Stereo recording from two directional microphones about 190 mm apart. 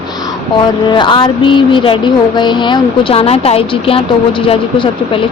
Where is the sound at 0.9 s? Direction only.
25° left (ahead or behind).